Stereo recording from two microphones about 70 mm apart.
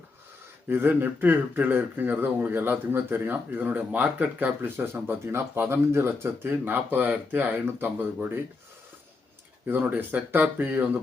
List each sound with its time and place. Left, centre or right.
0.7 s speech: right
9.6 s speech: right